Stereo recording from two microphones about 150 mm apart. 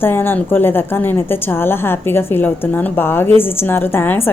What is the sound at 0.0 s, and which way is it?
A woman's voice, 15° left (ahead or behind).